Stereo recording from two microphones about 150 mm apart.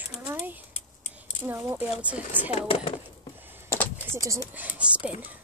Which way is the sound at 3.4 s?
15° right (ahead or behind).